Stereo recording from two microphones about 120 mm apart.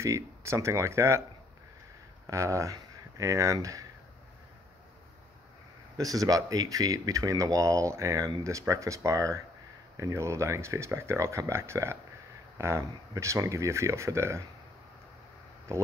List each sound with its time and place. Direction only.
0.0 s speech: 25° right (ahead or behind)
2.2 s speech: 25° right (ahead or behind)
5.9 s speech: 30° right (ahead or behind)